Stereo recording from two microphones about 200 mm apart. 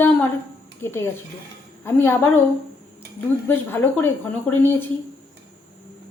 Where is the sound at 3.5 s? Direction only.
10° left (ahead or behind).